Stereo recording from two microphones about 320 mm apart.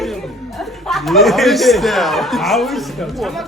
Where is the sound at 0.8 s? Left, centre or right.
Centre.